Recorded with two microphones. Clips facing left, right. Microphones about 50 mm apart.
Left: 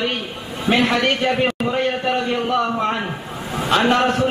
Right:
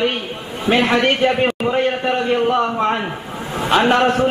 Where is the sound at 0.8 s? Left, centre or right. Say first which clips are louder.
Right 3 dB; right.